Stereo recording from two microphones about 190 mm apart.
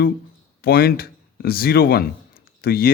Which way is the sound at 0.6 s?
55° left (ahead or behind).